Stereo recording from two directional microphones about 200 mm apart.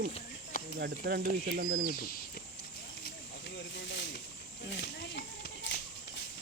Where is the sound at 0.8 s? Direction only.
55° right (ahead or behind).